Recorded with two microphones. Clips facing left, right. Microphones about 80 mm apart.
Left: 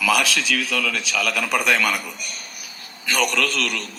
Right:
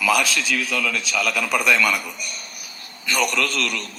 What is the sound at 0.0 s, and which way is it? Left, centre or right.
A man's voice, left.